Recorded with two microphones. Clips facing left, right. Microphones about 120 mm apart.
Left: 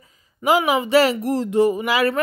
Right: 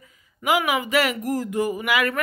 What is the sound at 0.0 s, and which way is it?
Speech, 35° left (ahead or behind).